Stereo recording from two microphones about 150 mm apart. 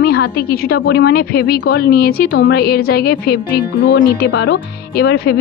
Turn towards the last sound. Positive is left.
turn(degrees=90)